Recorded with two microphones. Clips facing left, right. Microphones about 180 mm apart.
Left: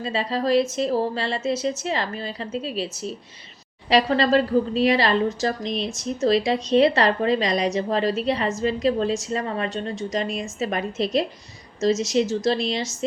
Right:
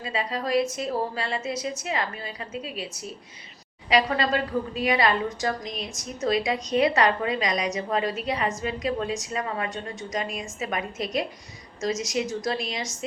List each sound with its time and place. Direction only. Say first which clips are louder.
0.0 s a woman's voice: left 5 dB; 30° left (ahead or behind)